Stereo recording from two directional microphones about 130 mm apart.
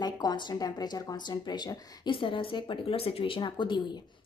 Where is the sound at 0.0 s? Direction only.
30° left (ahead or behind).